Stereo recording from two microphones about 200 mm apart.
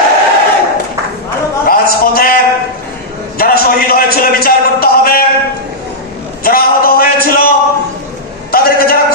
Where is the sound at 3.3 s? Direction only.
50° left (ahead or behind).